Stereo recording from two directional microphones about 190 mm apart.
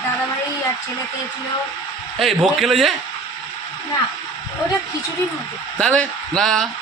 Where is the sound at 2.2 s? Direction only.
Centre (ahead or behind).